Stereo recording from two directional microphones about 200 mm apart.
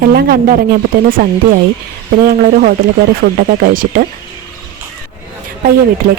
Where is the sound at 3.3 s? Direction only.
50° right (ahead or behind).